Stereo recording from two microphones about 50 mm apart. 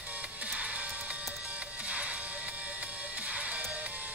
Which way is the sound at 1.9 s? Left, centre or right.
Right.